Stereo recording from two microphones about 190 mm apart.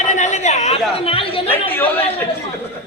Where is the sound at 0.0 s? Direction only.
40° left (ahead or behind).